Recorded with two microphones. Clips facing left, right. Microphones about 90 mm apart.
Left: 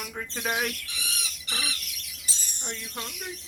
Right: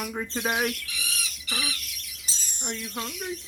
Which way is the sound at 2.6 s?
15° right (ahead or behind).